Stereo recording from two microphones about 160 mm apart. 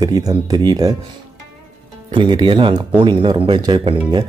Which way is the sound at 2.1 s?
30° right (ahead or behind).